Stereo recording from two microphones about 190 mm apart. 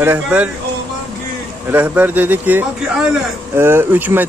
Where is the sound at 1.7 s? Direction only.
10° right (ahead or behind).